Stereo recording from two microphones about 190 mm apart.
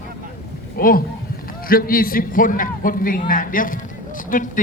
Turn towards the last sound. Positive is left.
turn(degrees=45)  # may be behind; listen again after turning